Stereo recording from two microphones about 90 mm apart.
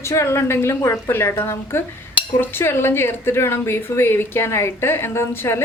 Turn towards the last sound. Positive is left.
turn(degrees=25)  # may be behind; listen again after turning